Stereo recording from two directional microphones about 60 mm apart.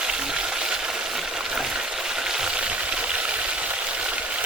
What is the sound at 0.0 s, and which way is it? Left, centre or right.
Frying, centre.